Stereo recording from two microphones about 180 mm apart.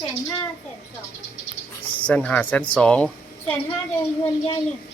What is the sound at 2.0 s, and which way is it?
Speech, 5° left (ahead or behind).